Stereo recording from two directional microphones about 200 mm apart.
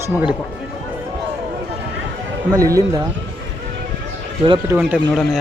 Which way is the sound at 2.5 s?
15° right (ahead or behind).